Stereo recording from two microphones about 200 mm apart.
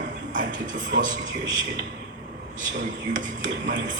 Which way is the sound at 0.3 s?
40° right (ahead or behind).